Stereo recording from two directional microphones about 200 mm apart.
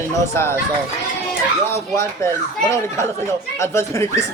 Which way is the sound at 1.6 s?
15° left (ahead or behind).